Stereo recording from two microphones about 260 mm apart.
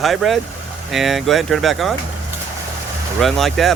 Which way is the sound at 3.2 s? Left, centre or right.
Centre.